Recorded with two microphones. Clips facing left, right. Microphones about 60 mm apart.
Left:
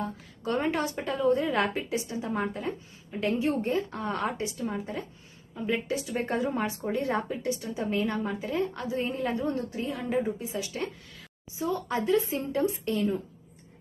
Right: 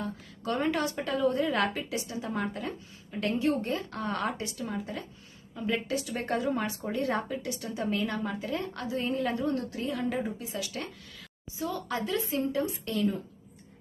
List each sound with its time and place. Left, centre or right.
0.4 s a woman's voice: left